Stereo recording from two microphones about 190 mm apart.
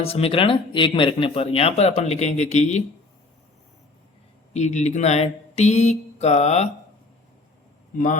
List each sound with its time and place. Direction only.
0.0 s speech: 30° left (ahead or behind)
4.5 s speech: 40° left (ahead or behind)
7.9 s speech: 40° left (ahead or behind)